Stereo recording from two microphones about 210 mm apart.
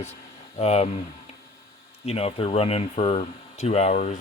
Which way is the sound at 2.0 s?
30° left (ahead or behind).